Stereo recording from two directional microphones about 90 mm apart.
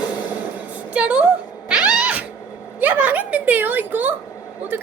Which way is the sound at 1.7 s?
15° right (ahead or behind).